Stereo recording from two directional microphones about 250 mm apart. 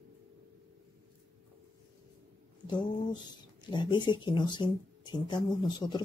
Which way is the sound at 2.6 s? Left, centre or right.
Centre.